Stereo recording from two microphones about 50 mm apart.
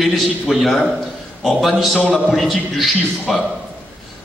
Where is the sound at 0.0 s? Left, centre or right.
Centre.